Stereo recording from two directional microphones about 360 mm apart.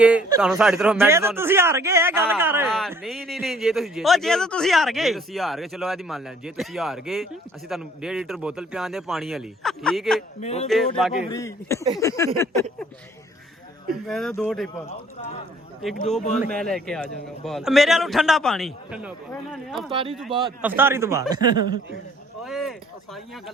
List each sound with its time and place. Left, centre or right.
0.0 s speech: centre
10.4 s speech: centre
10.9 s speech: centre
14.1 s speech: centre
16.3 s speech: centre
19.9 s speech: centre
22.4 s a sound: centre